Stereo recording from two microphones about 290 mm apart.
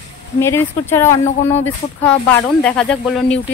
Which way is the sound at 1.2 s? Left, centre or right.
Left.